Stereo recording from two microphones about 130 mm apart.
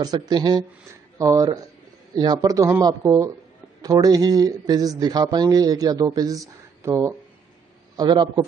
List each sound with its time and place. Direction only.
0.0 s speech: 30° right (ahead or behind)
7.9 s a man's voice: 35° right (ahead or behind)